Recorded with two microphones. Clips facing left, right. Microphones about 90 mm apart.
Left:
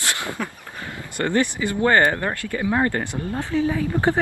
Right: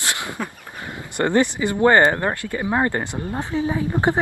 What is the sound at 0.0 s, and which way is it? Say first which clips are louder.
Speech: even; 20° right (ahead or behind).